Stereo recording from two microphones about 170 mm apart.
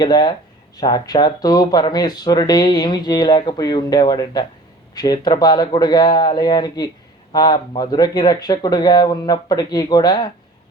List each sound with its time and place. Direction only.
0.0 s speech: 25° left (ahead or behind)